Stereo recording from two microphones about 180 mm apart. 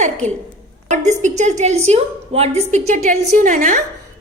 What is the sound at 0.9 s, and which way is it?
A woman's voice, 40° right (ahead or behind).